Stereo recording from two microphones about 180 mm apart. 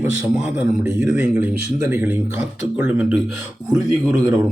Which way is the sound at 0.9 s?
5° right (ahead or behind).